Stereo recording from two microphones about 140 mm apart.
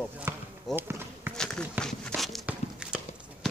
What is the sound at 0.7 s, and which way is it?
Run, 15° right (ahead or behind).